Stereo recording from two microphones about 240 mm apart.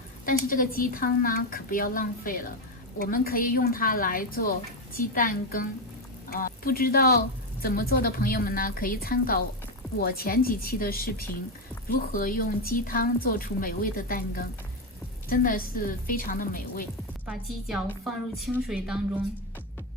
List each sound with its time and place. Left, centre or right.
0.3 s a woman's voice: left
17.2 s a woman's voice: centre